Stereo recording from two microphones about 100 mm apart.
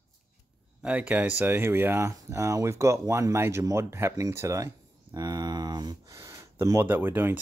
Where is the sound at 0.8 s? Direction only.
15° right (ahead or behind); by 4.7 s 30° right (ahead or behind).